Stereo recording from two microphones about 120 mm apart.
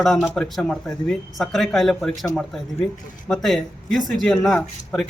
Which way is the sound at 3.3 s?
Centre (ahead or behind).